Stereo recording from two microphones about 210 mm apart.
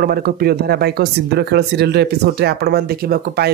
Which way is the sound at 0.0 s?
45° right (ahead or behind).